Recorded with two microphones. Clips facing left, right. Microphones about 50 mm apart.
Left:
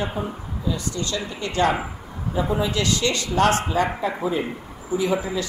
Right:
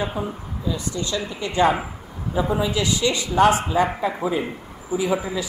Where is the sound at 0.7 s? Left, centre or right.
Right.